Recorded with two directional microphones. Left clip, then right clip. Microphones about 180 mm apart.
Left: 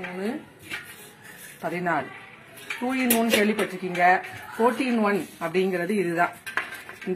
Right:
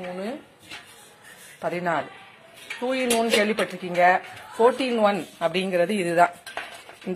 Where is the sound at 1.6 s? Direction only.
45° right (ahead or behind).